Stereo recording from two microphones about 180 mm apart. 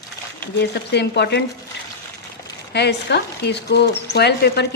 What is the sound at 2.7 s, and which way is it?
Speech, 70° left (ahead or behind).